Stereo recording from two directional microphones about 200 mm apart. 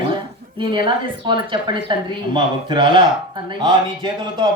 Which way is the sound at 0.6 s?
25° right (ahead or behind).